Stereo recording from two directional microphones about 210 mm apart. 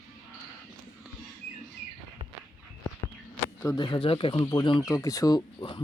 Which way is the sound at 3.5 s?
20° left (ahead or behind).